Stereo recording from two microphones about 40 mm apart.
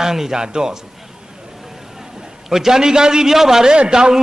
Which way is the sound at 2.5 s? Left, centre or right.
Centre.